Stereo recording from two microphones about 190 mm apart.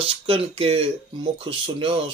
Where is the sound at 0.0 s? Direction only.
30° right (ahead or behind).